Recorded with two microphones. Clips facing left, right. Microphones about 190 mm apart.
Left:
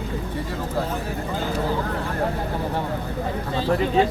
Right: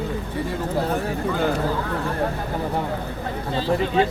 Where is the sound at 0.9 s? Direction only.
60° right (ahead or behind).